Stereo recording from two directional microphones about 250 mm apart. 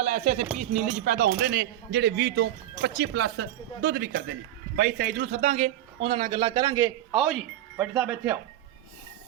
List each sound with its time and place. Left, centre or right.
0.0 s speech: right
5.3 s a man's voice: right; by 8.4 s centre